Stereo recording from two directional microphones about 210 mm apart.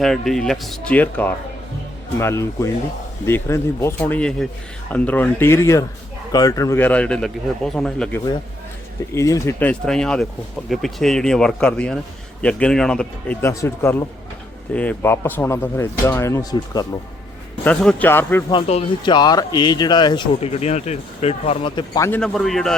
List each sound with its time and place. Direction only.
0.0 s speech: centre (ahead or behind)
9.1 s speech: 15° left (ahead or behind)
18.5 s speech: 25° left (ahead or behind)
22.2 s speech: centre (ahead or behind)